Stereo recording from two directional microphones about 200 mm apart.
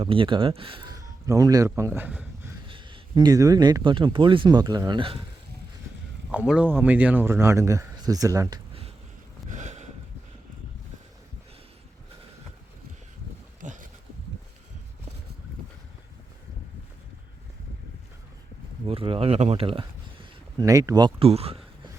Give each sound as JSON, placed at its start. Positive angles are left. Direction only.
{"t": 0.0, "sound": "speech", "side_deg": -25}
{"t": 2.6, "sound": "speech", "side_deg": -25}
{"t": 6.3, "sound": "speech", "side_deg": -5}
{"t": 9.5, "sound": "a sound", "side_deg": -35}
{"t": 13.6, "sound": "a sound", "side_deg": -40}
{"t": 18.9, "sound": "speech", "side_deg": -25}